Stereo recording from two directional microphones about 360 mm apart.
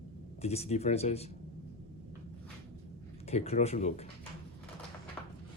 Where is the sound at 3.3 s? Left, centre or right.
Centre.